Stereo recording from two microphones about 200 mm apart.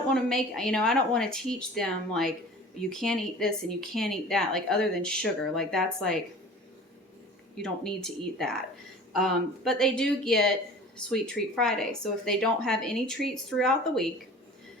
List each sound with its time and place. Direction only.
0.1 s a woman's voice: centre (ahead or behind)
7.5 s a woman's voice: centre (ahead or behind)